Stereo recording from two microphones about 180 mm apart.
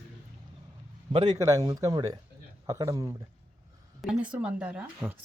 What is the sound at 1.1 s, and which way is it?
Speech, 30° right (ahead or behind).